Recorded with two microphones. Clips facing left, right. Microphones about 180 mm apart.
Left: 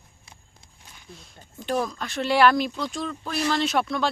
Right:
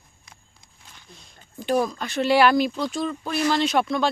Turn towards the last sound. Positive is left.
turn(degrees=0)  # may be behind; listen again after turning